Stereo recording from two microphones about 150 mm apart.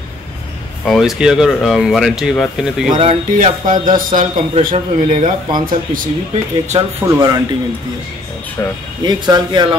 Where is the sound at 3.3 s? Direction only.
60° right (ahead or behind).